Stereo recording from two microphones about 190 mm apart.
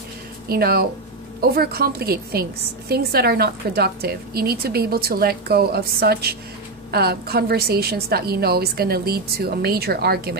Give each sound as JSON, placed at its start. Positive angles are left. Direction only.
{"t": 0.5, "sound": "a woman's voice", "side_deg": -55}